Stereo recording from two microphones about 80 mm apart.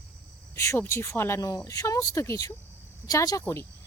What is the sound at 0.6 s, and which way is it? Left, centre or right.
Speech, left.